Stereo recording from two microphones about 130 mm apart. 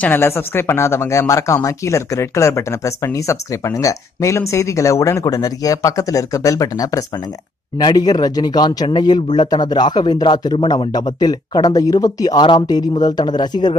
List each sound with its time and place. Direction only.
0.0 s speech: 15° left (ahead or behind); by 13.7 s 35° left (ahead or behind)